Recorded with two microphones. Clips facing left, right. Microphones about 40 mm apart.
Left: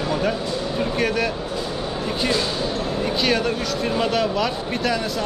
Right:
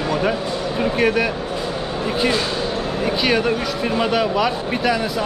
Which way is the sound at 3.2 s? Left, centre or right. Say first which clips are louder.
Right 4 dB; centre.